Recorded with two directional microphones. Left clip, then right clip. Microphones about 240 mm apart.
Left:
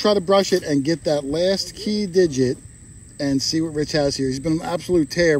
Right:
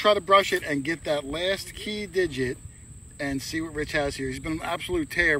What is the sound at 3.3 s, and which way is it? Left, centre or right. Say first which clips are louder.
A man's voice: left 11 dB; left.